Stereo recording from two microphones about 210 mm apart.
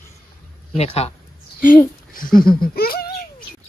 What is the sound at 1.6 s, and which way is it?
Speech, 40° left (ahead or behind).